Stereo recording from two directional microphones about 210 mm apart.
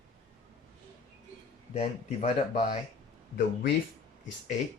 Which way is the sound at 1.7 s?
30° left (ahead or behind).